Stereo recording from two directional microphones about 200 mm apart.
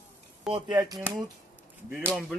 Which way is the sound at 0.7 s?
15° right (ahead or behind).